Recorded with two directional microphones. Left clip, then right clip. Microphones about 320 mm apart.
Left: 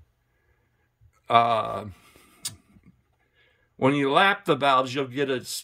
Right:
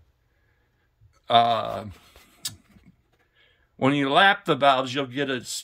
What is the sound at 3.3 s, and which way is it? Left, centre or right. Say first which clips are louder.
Speech: even; centre.